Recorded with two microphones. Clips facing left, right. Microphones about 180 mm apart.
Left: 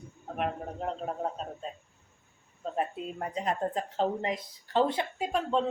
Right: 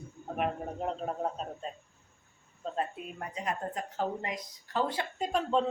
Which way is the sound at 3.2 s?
30° left (ahead or behind).